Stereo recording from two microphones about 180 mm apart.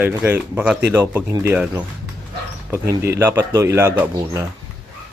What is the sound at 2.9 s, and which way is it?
Speech, 15° right (ahead or behind).